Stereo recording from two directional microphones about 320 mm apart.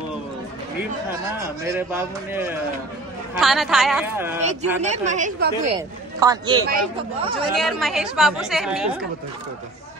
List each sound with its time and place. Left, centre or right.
1.4 s a woman's voice: centre
4.4 s speech: right
5.8 s a man's voice: centre
7.5 s a woman's voice: centre